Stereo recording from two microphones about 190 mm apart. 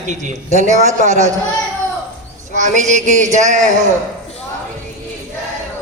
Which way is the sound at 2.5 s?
40° right (ahead or behind).